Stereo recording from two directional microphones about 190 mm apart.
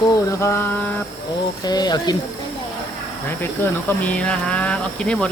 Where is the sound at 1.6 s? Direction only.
20° left (ahead or behind).